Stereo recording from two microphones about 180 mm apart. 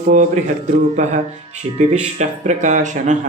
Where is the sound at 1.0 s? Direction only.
40° right (ahead or behind).